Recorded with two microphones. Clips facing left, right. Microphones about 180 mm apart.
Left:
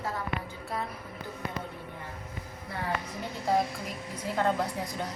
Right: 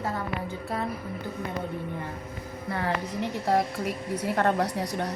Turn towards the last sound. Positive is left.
turn(degrees=-70)  # may be behind; listen again after turning